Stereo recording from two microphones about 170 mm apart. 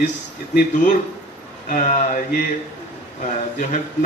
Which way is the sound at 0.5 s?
45° left (ahead or behind).